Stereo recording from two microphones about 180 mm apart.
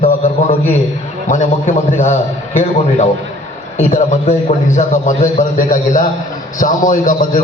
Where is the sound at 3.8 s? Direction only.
40° left (ahead or behind).